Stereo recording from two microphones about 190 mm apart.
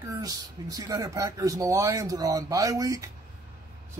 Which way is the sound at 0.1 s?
20° right (ahead or behind).